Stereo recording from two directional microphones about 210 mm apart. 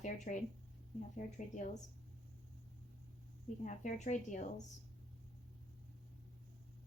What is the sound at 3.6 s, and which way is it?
A woman's voice, 35° left (ahead or behind).